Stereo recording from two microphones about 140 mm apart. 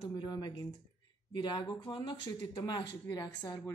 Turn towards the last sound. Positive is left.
turn(degrees=25)  # may be behind; listen again after turning